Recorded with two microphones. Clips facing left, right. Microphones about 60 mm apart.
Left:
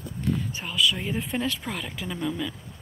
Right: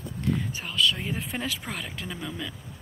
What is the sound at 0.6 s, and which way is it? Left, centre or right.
Speech, centre.